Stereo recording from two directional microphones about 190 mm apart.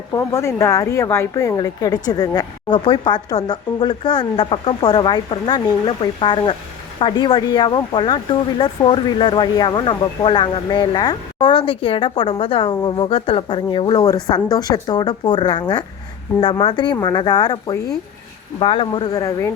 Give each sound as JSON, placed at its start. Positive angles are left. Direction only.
{"t": 0.1, "sound": "speech", "side_deg": 15}